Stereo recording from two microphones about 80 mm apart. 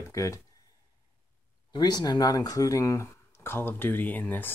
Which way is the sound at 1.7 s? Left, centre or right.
Left.